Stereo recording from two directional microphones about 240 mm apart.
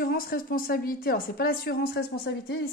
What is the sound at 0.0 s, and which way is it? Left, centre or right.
A woman's voice, left.